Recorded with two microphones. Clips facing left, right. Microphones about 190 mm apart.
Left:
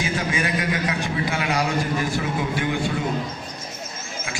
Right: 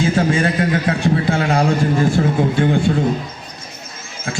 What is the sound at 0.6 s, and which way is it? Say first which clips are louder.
Speech: right 8 dB; 50° right (ahead or behind).